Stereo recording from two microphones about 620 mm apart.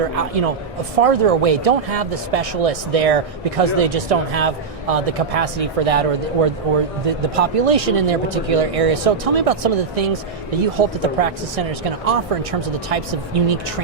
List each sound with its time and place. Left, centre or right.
0.2 s a man's voice: right